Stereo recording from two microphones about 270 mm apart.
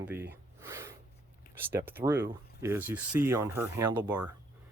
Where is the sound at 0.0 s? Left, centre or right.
Centre.